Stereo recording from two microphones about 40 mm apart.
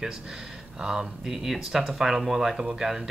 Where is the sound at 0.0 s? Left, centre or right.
Centre.